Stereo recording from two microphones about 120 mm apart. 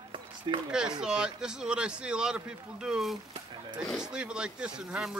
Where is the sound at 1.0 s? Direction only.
5° right (ahead or behind).